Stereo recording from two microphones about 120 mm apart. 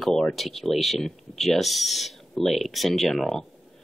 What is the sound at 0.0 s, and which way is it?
Speech, centre (ahead or behind).